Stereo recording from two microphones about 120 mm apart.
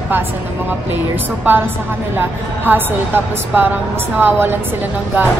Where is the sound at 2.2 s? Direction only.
15° right (ahead or behind).